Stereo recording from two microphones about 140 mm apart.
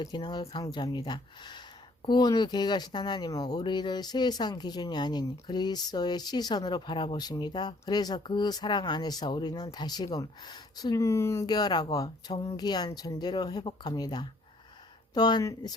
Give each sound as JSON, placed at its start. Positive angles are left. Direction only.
{"t": 0.0, "sound": "speech", "side_deg": 30}
{"t": 11.4, "sound": "speech", "side_deg": 30}